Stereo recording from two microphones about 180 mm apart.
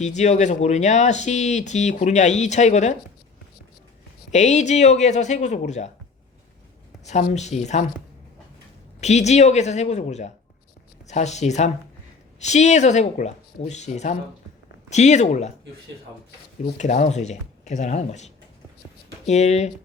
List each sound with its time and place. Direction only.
0.0 s speech: 40° left (ahead or behind)
4.3 s speech: 40° left (ahead or behind)
7.0 s speech: 40° left (ahead or behind)
9.0 s speech: 40° left (ahead or behind)
16.7 s speech: 40° left (ahead or behind)